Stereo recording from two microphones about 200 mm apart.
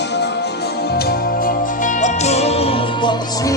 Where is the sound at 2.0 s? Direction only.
35° left (ahead or behind).